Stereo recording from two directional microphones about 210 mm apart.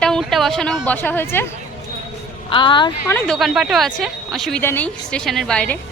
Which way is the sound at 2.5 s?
25° left (ahead or behind).